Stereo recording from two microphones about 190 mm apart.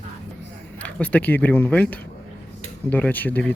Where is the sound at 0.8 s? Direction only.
10° left (ahead or behind).